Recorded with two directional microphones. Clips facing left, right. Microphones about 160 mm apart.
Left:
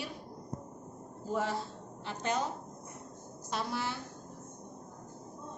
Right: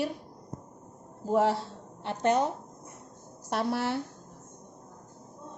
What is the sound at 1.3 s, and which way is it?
A woman's voice, 70° right (ahead or behind).